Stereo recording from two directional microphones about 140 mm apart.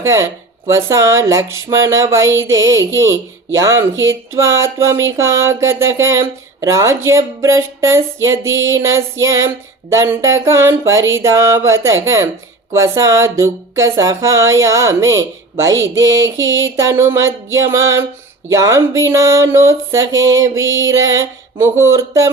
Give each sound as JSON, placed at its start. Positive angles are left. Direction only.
{"t": 0.0, "sound": "speech", "side_deg": -20}